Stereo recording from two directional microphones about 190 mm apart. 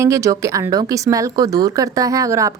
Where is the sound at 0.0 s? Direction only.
15° right (ahead or behind).